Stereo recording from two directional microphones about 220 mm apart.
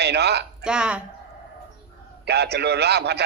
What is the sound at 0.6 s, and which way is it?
Speech, 5° right (ahead or behind).